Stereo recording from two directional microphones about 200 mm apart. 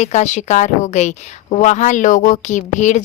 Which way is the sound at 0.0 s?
35° left (ahead or behind).